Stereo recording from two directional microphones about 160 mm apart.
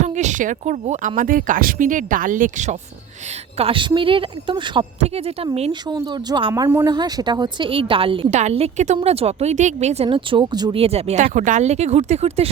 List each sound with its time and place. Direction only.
0.0 s speech: 45° right (ahead or behind)
3.6 s speech: 35° right (ahead or behind)
4.9 s speech: 40° right (ahead or behind)
5.9 s speech: 25° right (ahead or behind)
6.5 s speech: 15° right (ahead or behind); by 8.3 s 35° right (ahead or behind)
8.3 s speech: 45° right (ahead or behind); by 10.8 s 30° right (ahead or behind)
10.8 s speech: 40° right (ahead or behind)